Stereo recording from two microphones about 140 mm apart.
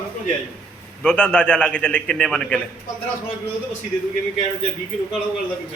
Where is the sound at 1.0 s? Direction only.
5° left (ahead or behind).